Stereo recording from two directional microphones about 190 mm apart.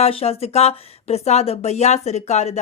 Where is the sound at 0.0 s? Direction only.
30° left (ahead or behind).